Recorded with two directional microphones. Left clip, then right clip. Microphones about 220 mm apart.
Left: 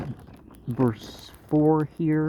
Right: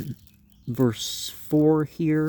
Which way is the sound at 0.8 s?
55° right (ahead or behind).